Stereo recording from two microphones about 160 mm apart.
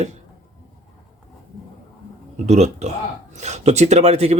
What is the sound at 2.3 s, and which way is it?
A man's voice, 45° right (ahead or behind).